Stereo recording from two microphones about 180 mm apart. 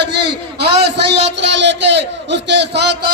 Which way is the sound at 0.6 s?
65° right (ahead or behind).